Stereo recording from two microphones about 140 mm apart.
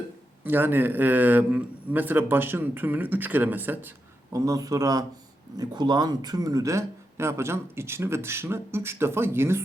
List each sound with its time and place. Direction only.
0.4 s a man's voice: 15° right (ahead or behind)